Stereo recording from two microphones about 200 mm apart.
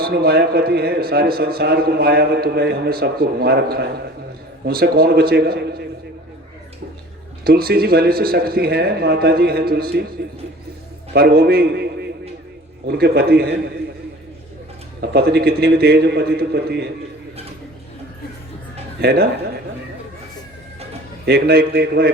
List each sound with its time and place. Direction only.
0.0 s a man's voice: 50° right (ahead or behind)
7.4 s a man's voice: 50° right (ahead or behind)
11.1 s a man's voice: 50° right (ahead or behind)
15.0 s a man's voice: 55° right (ahead or behind)
19.0 s a man's voice: 50° right (ahead or behind)
21.2 s a man's voice: 50° right (ahead or behind)